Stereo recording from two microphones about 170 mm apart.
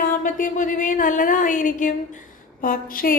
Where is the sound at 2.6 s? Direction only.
55° left (ahead or behind).